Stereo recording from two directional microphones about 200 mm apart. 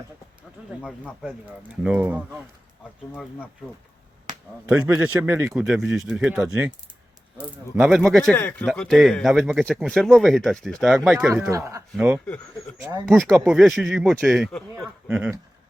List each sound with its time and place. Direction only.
0.8 s speech: centre (ahead or behind)
3.1 s speech: 10° left (ahead or behind)
4.3 s a sound: 40° right (ahead or behind)
5.0 s speech: 10° right (ahead or behind)
11.4 s speech: 15° right (ahead or behind)
13.1 s speech: 5° left (ahead or behind)
15.0 s speech: 10° right (ahead or behind)